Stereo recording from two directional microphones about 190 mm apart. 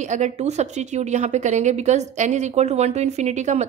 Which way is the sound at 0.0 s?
40° right (ahead or behind).